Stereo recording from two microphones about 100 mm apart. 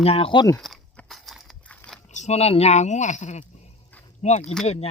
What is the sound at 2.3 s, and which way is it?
Speech, 90° left.